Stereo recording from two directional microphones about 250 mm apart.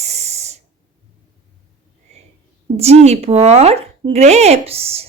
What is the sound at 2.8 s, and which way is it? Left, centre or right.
Speech, right.